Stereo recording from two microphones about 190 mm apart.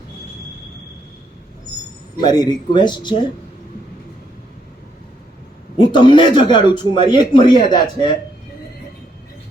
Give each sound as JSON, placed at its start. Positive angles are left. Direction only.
{"t": 2.2, "sound": "a man's voice", "side_deg": 20}
{"t": 5.7, "sound": "a man's voice", "side_deg": 25}